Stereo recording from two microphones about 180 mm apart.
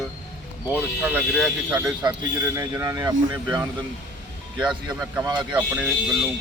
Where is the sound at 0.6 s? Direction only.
10° right (ahead or behind).